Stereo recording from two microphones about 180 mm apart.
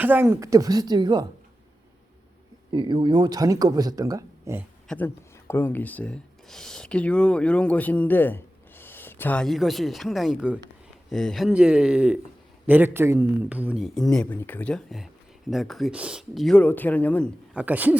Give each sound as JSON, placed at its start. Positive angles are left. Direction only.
{"t": 0.0, "sound": "speech", "side_deg": -10}
{"t": 2.7, "sound": "speech", "side_deg": -25}
{"t": 4.9, "sound": "a man's voice", "side_deg": 10}
{"t": 17.5, "sound": "speech", "side_deg": -10}